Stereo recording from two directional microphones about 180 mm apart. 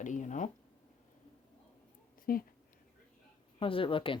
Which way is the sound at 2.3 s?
50° left (ahead or behind).